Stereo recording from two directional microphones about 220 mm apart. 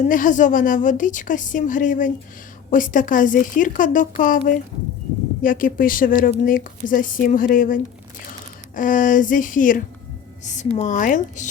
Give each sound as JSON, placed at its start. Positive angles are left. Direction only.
{"t": 0.0, "sound": "a woman's voice", "side_deg": 35}